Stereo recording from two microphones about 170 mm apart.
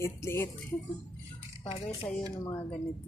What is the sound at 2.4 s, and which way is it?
Speech, 20° left (ahead or behind).